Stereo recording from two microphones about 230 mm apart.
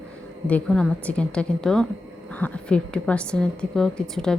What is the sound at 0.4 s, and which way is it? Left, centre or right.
A woman's voice, centre.